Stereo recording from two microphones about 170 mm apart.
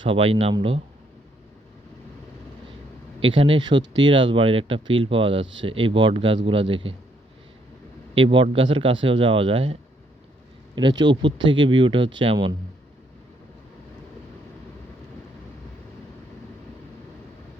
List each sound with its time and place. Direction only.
0.0 s speech: 30° right (ahead or behind)
3.2 s speech: 30° right (ahead or behind)
8.1 s speech: 30° right (ahead or behind)
10.8 s speech: 25° right (ahead or behind)